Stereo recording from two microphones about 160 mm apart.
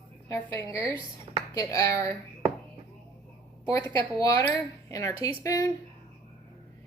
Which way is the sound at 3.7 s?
20° left (ahead or behind).